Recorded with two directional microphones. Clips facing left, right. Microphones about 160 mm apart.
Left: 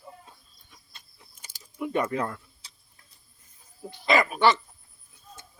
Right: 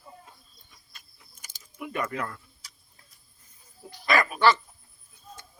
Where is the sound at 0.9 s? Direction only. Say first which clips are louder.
Left 2 dB; 30° left (ahead or behind).